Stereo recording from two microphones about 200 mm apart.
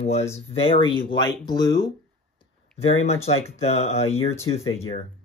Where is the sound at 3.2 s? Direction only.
30° left (ahead or behind).